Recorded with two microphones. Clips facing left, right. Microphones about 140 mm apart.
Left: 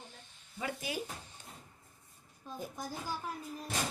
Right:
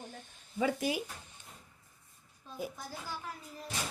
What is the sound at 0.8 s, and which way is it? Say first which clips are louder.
Speech: right 5 dB; 45° right (ahead or behind).